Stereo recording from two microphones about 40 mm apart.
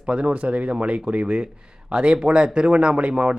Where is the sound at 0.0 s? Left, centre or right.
Right.